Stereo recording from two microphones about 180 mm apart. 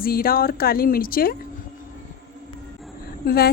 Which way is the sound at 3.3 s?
60° left (ahead or behind).